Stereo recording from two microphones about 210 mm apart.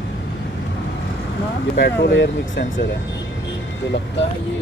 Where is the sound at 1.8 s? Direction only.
55° left (ahead or behind).